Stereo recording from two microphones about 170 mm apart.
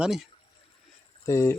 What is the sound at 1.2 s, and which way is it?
Speech, 15° left (ahead or behind).